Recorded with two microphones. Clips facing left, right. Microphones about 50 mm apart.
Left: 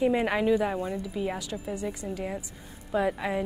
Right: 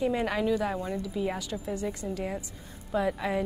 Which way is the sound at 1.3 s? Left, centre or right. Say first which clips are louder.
Even; centre.